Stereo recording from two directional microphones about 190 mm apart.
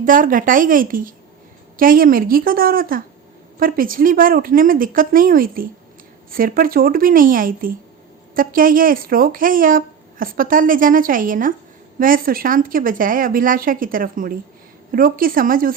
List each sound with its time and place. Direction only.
0.0 s a woman's voice: 45° right (ahead or behind)